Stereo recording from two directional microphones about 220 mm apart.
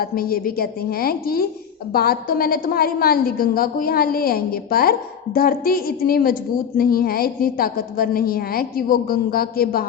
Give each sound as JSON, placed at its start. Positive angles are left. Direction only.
{"t": 0.0, "sound": "a woman's voice", "side_deg": 40}